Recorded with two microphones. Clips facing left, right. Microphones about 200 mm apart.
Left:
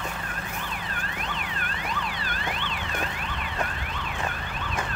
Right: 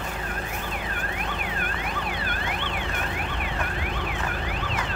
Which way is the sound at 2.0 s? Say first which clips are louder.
Right 2 dB; 60° right (ahead or behind).